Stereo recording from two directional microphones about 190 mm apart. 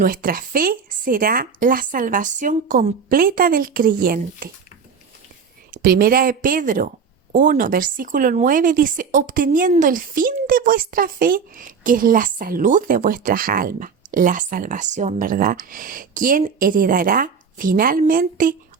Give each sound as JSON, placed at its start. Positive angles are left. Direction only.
{"t": 0.0, "sound": "a woman's voice", "side_deg": -50}
{"t": 5.7, "sound": "a woman's voice", "side_deg": -50}